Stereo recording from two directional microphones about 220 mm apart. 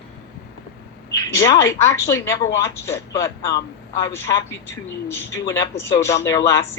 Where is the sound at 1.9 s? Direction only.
15° left (ahead or behind).